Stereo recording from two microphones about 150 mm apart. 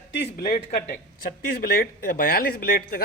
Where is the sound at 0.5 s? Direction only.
65° left (ahead or behind).